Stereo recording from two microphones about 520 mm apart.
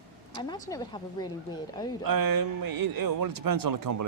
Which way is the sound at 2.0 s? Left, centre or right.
Right.